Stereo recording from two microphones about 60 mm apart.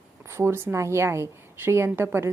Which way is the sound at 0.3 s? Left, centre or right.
Right.